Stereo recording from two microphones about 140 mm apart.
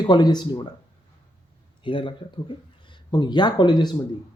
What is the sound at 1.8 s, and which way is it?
Speech, 35° left (ahead or behind).